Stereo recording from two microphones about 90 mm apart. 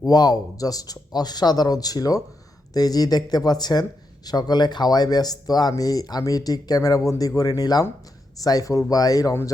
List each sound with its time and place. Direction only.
0.0 s speech: 45° left (ahead or behind)